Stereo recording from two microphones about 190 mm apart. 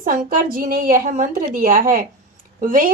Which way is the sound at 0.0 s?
45° right (ahead or behind).